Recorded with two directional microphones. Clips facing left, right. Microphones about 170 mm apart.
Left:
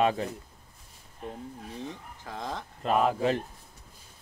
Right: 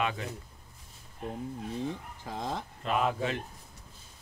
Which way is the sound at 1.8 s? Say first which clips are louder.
Right 4 dB; 15° right (ahead or behind).